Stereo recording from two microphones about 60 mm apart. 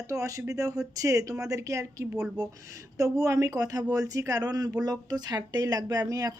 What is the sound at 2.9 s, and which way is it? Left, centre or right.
Speech, right.